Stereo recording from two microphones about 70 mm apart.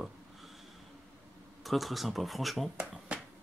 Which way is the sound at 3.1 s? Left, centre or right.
Centre.